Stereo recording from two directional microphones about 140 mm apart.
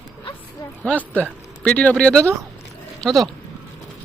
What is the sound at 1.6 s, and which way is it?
A man's voice, 10° left (ahead or behind).